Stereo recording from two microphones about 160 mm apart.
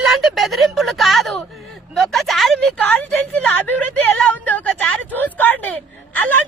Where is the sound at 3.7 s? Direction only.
10° left (ahead or behind).